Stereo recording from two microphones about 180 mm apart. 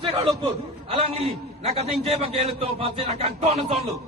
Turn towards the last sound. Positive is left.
turn(degrees=-35)  # may be behind; listen again after turning